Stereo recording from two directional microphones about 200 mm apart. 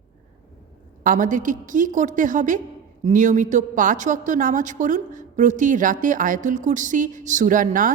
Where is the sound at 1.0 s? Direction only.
40° right (ahead or behind).